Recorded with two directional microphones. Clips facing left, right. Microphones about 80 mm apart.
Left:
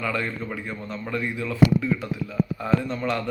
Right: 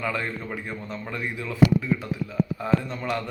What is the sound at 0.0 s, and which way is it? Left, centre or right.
Speech, centre.